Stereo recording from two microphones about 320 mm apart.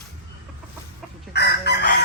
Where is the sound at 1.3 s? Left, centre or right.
Left.